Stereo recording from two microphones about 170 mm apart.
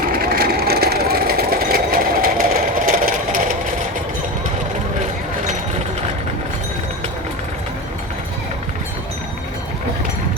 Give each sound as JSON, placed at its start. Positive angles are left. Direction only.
{"t": 0.0, "sound": "vehicle", "side_deg": -60}